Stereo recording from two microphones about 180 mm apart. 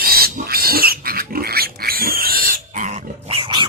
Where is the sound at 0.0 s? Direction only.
55° right (ahead or behind).